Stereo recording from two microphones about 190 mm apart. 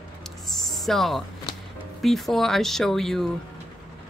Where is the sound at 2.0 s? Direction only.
Centre (ahead or behind).